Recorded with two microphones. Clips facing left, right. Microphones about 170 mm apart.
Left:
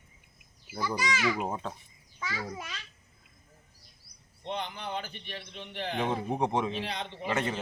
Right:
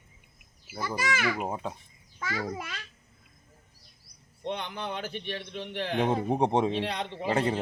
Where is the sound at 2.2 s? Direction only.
55° right (ahead or behind).